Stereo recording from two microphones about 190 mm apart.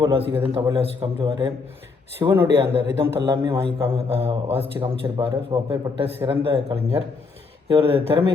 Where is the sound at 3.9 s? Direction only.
30° right (ahead or behind).